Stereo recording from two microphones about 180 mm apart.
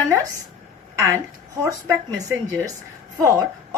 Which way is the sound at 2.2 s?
15° right (ahead or behind).